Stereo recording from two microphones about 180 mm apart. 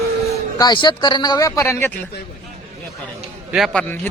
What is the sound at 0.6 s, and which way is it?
Speech, 25° left (ahead or behind).